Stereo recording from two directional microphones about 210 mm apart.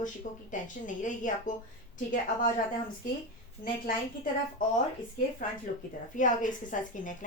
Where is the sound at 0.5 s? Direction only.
35° left (ahead or behind).